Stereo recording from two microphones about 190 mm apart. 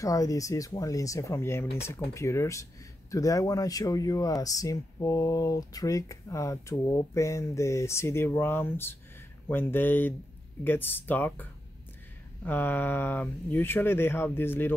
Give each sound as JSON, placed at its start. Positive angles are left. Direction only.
{"t": 0.0, "sound": "speech", "side_deg": 15}
{"t": 12.4, "sound": "speech", "side_deg": 10}